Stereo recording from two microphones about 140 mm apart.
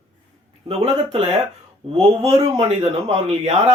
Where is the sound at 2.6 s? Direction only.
50° right (ahead or behind).